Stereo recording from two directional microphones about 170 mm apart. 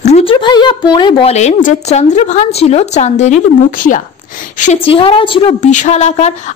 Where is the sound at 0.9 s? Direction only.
30° left (ahead or behind); by 4.0 s 50° left (ahead or behind).